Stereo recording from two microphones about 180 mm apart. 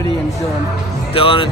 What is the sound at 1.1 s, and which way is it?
Speech, 30° left (ahead or behind).